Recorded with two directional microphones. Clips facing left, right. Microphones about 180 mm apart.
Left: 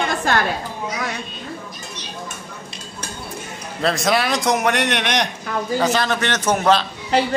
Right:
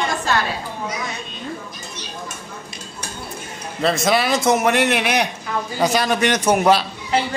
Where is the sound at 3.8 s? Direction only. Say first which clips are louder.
Right 1 dB; centre (ahead or behind).